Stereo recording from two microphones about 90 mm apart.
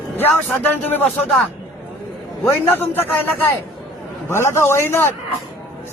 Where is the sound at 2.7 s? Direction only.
25° left (ahead or behind).